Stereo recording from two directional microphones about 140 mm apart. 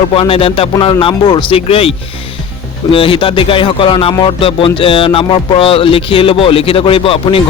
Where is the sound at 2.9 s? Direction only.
40° left (ahead or behind).